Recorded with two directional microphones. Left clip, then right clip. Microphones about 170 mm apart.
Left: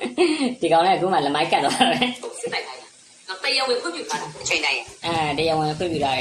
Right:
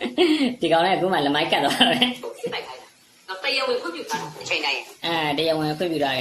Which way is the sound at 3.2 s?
25° left (ahead or behind).